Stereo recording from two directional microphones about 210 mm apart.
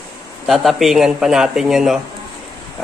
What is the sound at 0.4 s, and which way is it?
Speech, centre (ahead or behind).